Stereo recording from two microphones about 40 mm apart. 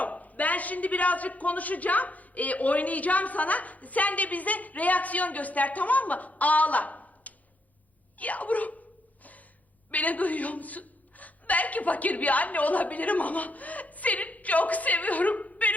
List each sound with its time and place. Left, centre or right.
0.0 s a man's voice: left
9.9 s a man's voice: left